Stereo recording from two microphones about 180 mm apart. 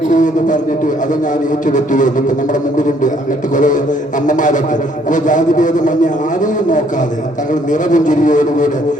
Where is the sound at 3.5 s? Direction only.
45° left (ahead or behind).